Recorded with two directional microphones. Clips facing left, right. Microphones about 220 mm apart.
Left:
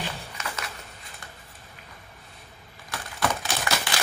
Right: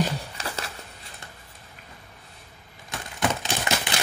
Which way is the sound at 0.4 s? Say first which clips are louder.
Left 1 dB; 35° right (ahead or behind).